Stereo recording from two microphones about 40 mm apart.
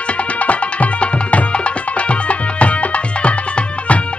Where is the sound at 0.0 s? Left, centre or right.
Left.